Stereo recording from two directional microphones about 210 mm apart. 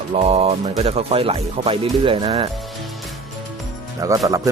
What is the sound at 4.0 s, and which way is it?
Speech, 15° right (ahead or behind).